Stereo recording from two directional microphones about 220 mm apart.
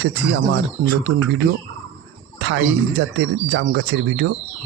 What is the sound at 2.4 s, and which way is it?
Speech, 55° right (ahead or behind).